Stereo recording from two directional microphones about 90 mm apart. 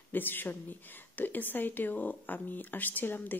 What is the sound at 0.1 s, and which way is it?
Speech, 20° left (ahead or behind).